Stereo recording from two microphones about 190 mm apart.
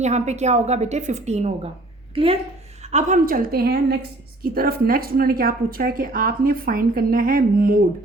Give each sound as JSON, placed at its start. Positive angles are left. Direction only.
{"t": 0.0, "sound": "a woman's voice", "side_deg": -35}